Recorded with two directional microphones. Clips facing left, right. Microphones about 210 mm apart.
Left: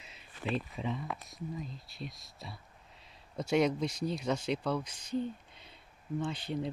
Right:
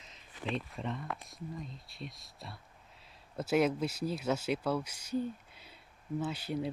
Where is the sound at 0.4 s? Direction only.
Centre (ahead or behind).